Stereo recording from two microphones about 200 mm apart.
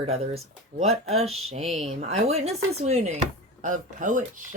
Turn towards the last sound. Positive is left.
turn(degrees=-40)  # may be behind; listen again after turning